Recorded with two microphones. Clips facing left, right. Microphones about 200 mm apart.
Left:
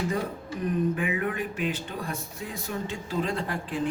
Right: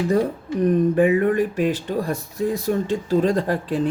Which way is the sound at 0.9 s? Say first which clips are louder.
Right 12 dB; 40° right (ahead or behind).